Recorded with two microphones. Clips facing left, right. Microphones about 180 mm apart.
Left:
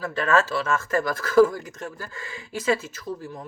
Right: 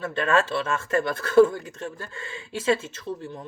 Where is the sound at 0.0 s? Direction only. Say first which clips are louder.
Left 1 dB; 25° right (ahead or behind).